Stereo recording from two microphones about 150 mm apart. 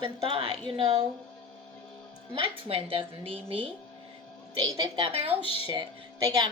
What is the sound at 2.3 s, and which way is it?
A woman's voice, 35° right (ahead or behind).